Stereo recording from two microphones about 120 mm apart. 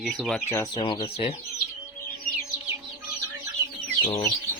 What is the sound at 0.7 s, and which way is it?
Speech, 45° left (ahead or behind).